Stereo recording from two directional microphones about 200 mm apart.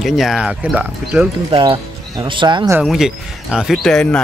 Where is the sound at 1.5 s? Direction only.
25° right (ahead or behind).